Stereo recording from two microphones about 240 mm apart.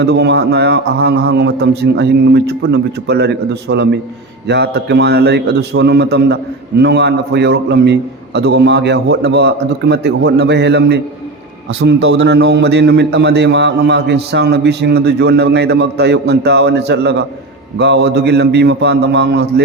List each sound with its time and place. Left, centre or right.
0.0 s a man's voice: right